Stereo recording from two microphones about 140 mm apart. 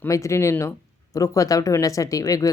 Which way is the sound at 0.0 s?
20° left (ahead or behind).